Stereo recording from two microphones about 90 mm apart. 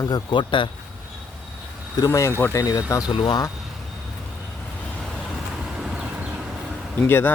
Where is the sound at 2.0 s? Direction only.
35° left (ahead or behind).